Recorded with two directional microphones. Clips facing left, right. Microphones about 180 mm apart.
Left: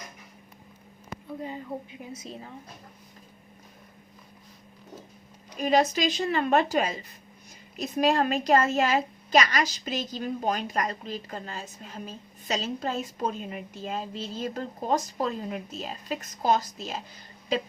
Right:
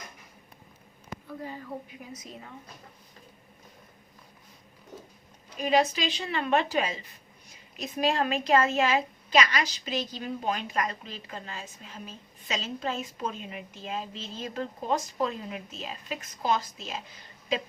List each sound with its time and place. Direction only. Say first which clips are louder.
1.3 s a woman's voice: left 3 dB; 20° left (ahead or behind)
5.5 s a woman's voice: left 2 dB; 45° left (ahead or behind)